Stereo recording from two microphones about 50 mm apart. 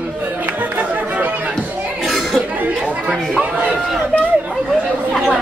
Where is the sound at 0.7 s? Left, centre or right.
Right.